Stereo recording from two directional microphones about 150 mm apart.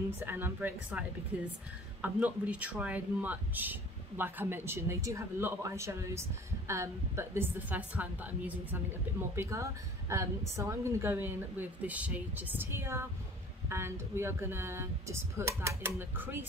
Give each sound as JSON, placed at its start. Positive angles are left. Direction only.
{"t": 0.2, "sound": "speech", "side_deg": -15}